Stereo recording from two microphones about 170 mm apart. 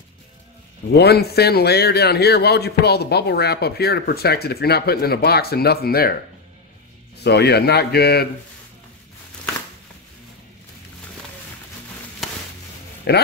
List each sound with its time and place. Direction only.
0.9 s a man's voice: 70° left (ahead or behind)
7.2 s a man's voice: 75° left (ahead or behind)
13.1 s speech: 75° left (ahead or behind)